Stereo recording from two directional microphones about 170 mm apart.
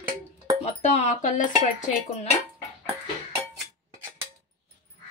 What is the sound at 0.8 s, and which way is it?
Speech, 45° left (ahead or behind).